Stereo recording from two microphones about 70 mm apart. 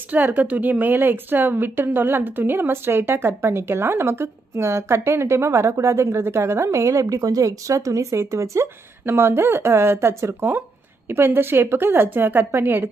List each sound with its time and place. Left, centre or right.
0.3 s a woman's voice: right